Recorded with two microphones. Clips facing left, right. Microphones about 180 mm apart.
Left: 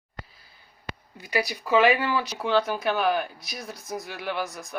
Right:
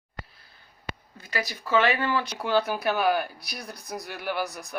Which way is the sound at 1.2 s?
15° left (ahead or behind).